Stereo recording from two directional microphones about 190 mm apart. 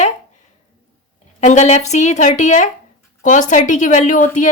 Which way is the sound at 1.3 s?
40° left (ahead or behind).